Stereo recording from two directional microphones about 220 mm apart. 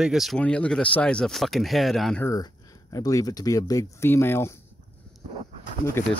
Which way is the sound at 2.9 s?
15° left (ahead or behind).